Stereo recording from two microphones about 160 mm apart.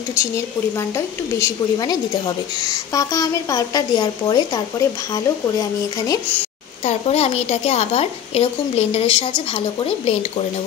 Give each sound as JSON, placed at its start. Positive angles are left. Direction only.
{"t": 0.7, "sound": "a woman's voice", "side_deg": 20}
{"t": 6.8, "sound": "a woman's voice", "side_deg": 45}